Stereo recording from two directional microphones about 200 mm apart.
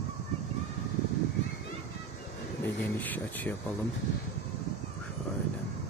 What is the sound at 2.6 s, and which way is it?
Speech, 10° left (ahead or behind).